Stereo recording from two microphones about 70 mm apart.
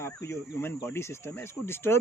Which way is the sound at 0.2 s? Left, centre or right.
Left.